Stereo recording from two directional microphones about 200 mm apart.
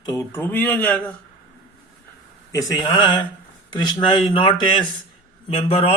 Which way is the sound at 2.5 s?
15° left (ahead or behind).